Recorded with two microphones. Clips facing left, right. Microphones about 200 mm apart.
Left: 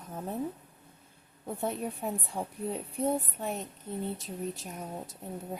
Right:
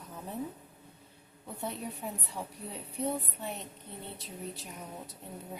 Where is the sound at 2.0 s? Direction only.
50° left (ahead or behind).